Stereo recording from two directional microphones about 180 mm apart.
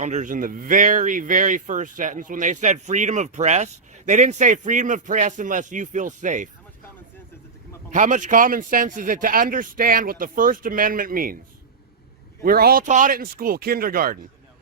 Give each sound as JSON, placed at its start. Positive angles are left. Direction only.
{"t": 0.0, "sound": "speech", "side_deg": -40}
{"t": 7.9, "sound": "speech", "side_deg": -45}
{"t": 12.4, "sound": "speech", "side_deg": -55}